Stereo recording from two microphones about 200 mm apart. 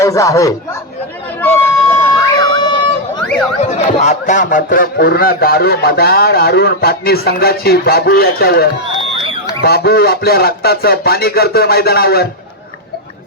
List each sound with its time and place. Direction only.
0.0 s speech: 15° left (ahead or behind)
1.4 s music: 10° left (ahead or behind)
3.2 s a sound: 5° left (ahead or behind)
3.6 s speech: 35° left (ahead or behind); by 8.6 s 50° left (ahead or behind)
9.6 s speech: 50° left (ahead or behind)